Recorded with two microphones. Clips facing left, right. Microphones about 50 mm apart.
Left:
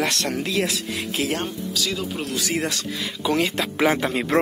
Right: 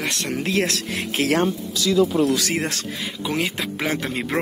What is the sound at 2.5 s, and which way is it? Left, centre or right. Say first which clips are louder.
Speech: even; right.